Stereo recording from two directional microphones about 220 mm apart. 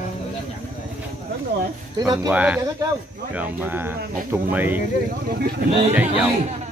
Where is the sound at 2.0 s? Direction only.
15° right (ahead or behind).